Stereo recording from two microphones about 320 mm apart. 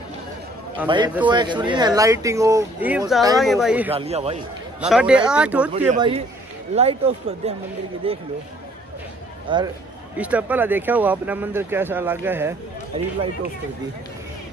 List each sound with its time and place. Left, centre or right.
0.8 s speech: centre
3.9 s speech: centre
4.8 s speech: centre
5.7 s speech: centre
9.5 s speech: centre
10.1 s speech: centre